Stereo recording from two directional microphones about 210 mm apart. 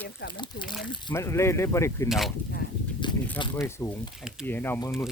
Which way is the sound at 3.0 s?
20° left (ahead or behind).